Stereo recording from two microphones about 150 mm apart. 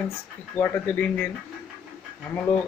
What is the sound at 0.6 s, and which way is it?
Speech, 10° left (ahead or behind).